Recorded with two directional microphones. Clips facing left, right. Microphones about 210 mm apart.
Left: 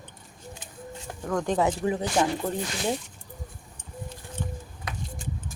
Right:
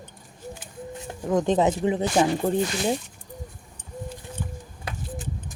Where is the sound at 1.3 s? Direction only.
20° right (ahead or behind).